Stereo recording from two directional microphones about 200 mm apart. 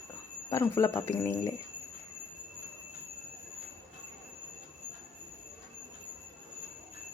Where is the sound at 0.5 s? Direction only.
15° left (ahead or behind).